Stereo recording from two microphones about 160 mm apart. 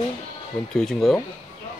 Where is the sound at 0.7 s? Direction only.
5° left (ahead or behind).